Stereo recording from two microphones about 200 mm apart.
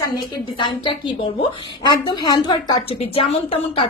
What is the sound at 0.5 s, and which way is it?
A woman's voice, 25° left (ahead or behind).